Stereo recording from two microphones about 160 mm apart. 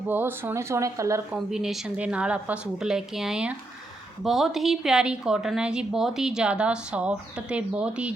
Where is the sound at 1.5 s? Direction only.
5° right (ahead or behind).